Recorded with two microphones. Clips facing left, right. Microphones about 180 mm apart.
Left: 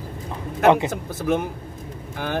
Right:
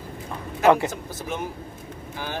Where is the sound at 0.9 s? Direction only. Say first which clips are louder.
Left 9 dB; 55° left (ahead or behind).